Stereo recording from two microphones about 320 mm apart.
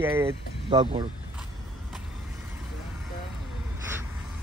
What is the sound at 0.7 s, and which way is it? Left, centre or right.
Speech, centre.